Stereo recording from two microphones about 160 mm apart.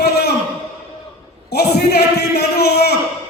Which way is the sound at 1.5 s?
90° left.